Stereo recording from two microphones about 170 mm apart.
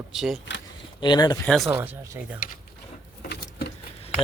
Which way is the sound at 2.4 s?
55° left (ahead or behind).